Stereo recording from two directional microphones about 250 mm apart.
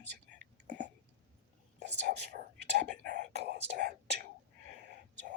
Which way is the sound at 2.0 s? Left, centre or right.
Right.